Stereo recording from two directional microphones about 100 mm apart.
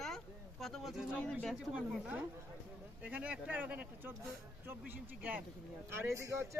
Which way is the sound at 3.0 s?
15° right (ahead or behind).